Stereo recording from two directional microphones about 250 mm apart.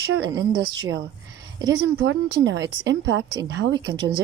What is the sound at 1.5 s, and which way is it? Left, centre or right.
Speech, centre.